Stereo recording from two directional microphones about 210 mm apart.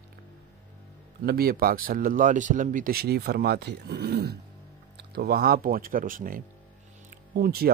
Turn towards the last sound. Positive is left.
turn(degrees=-45)  # may be behind; listen again after turning